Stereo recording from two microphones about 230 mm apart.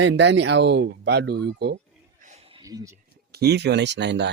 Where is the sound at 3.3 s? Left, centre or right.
Right.